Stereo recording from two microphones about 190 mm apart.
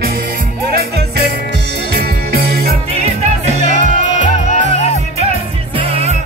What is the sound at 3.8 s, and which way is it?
Music, 40° left (ahead or behind).